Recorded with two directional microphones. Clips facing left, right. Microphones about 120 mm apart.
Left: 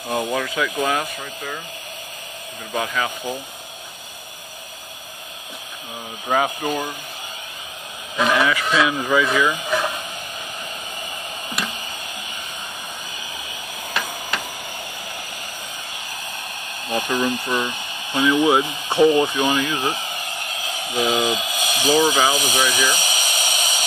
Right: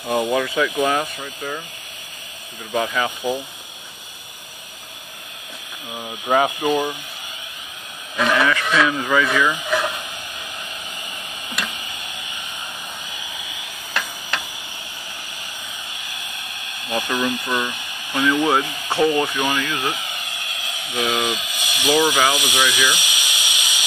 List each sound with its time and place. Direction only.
0.1 s speech: 5° right (ahead or behind)
2.7 s speech: centre (ahead or behind)
6.2 s speech: 5° right (ahead or behind)
8.2 s speech: 10° left (ahead or behind)
16.8 s speech: 30° left (ahead or behind)
18.1 s speech: 15° left (ahead or behind); by 23.8 s 40° left (ahead or behind)